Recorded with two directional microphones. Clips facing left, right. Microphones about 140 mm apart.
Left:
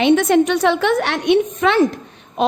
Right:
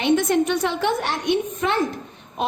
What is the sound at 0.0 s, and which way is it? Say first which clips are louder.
A woman's voice: left 5 dB; 75° left (ahead or behind).